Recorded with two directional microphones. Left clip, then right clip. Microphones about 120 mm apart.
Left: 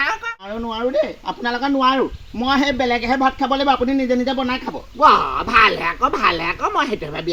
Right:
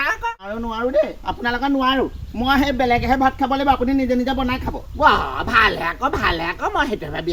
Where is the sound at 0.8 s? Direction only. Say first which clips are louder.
Right 1 dB; 5° left (ahead or behind).